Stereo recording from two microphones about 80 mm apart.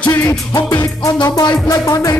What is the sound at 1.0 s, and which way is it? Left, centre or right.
Music, left.